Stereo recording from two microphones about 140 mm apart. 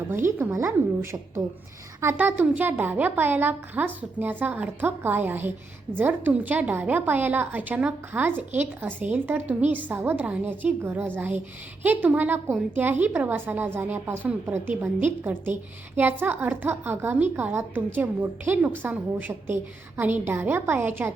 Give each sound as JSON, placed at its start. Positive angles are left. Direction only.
{"t": 0.1, "sound": "a woman's voice", "side_deg": -15}
{"t": 2.0, "sound": "a woman's voice", "side_deg": -15}